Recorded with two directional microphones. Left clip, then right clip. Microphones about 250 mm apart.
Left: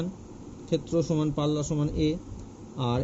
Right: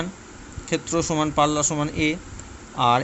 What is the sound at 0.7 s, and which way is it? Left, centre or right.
Speech, centre.